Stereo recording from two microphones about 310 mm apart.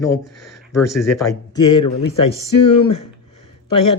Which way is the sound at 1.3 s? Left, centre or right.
Centre.